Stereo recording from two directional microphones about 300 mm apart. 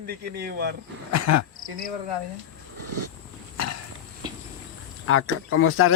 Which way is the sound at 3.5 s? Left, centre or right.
Left.